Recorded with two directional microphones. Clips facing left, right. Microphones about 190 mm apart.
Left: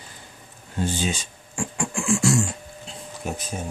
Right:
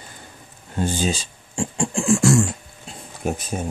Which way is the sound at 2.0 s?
50° right (ahead or behind).